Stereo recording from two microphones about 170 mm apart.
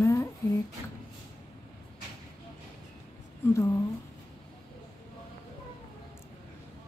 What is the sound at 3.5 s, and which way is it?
Speech, 20° left (ahead or behind).